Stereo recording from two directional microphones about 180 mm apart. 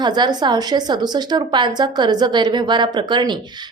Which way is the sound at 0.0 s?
25° right (ahead or behind).